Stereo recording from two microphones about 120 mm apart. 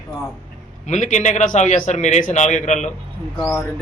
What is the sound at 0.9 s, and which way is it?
A man's voice, 75° left (ahead or behind).